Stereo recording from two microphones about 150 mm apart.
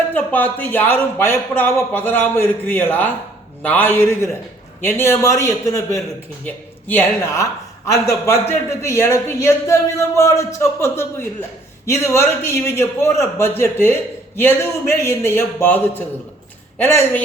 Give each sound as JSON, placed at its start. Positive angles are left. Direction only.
{"t": 0.1, "sound": "speech", "side_deg": 10}